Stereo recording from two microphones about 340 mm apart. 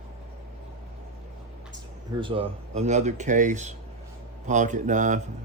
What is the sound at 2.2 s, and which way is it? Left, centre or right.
Speech, centre.